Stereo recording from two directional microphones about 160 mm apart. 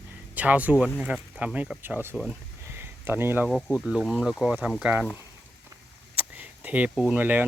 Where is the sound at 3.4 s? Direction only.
Centre (ahead or behind).